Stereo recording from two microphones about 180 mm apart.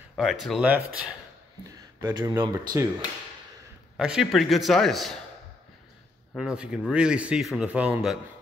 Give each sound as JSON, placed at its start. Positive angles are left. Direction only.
{"t": 0.1, "sound": "a man's voice", "side_deg": 0}
{"t": 2.0, "sound": "speech", "side_deg": -25}
{"t": 3.9, "sound": "a man's voice", "side_deg": 0}
{"t": 6.3, "sound": "a man's voice", "side_deg": -5}